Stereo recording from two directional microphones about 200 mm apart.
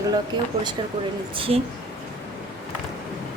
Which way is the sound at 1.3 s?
30° right (ahead or behind).